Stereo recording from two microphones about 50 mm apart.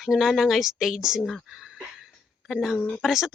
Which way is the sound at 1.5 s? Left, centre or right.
Centre.